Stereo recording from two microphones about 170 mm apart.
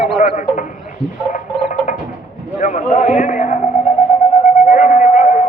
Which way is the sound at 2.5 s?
45° left (ahead or behind).